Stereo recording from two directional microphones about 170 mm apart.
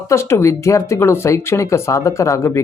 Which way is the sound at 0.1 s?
15° left (ahead or behind).